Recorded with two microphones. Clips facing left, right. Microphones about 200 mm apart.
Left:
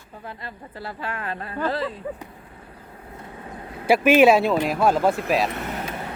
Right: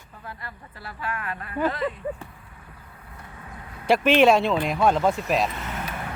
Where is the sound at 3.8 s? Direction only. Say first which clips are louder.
Left 2 dB; 5° left (ahead or behind).